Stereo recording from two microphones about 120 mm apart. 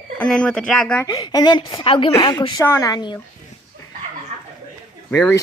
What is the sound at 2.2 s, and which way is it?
Speech, 35° left (ahead or behind).